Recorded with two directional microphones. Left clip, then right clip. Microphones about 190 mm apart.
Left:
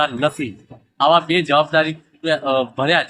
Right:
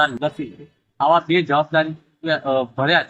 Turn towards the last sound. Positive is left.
turn(degrees=25)  # may be behind; listen again after turning